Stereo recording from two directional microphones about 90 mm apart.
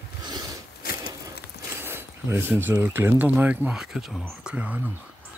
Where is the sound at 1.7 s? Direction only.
25° right (ahead or behind).